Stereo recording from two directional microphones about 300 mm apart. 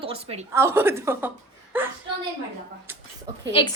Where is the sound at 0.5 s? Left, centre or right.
Centre.